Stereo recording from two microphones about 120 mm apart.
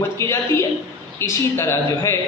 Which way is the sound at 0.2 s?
25° left (ahead or behind).